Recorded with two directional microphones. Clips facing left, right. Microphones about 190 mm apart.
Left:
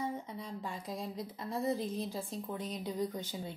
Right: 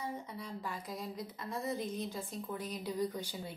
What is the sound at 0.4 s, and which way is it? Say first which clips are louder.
Speech: left 1 dB; 25° left (ahead or behind).